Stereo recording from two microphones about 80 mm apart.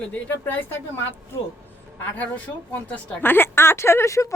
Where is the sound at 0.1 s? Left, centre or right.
Left.